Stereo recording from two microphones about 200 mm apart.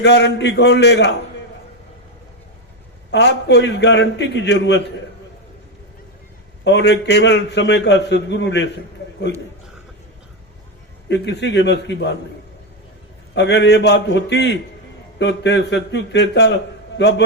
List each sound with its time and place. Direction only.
0.0 s a man's voice: 60° left (ahead or behind)
3.1 s a man's voice: 60° left (ahead or behind)
6.7 s a man's voice: 60° left (ahead or behind)
11.1 s a man's voice: 60° left (ahead or behind)
13.3 s a man's voice: 60° left (ahead or behind)